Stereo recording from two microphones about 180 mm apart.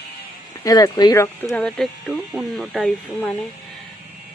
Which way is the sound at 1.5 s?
5° left (ahead or behind).